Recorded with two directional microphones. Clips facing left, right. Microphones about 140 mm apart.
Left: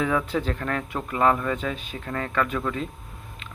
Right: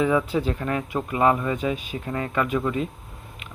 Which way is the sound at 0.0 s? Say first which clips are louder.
Right 3 dB; 5° right (ahead or behind).